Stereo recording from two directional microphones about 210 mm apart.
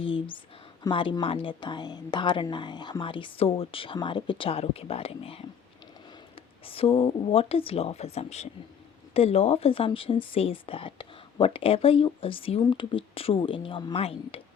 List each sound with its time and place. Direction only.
0.9 s speech: 20° left (ahead or behind)